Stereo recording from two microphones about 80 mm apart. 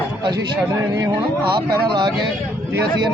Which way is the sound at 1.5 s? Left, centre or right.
Right.